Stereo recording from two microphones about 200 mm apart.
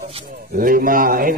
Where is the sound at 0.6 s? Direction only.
45° right (ahead or behind).